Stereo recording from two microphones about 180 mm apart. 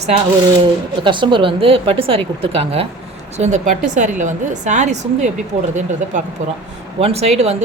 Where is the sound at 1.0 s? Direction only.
25° right (ahead or behind).